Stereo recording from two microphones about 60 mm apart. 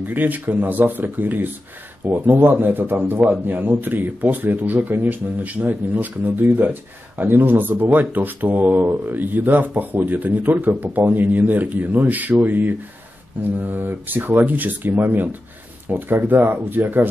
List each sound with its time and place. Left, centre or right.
0.1 s speech: right